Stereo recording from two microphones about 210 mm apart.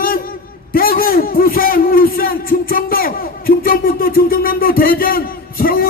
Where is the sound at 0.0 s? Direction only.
45° left (ahead or behind).